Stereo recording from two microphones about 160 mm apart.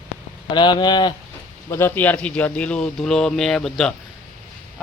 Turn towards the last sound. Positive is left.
turn(degrees=5)  # may be behind; listen again after turning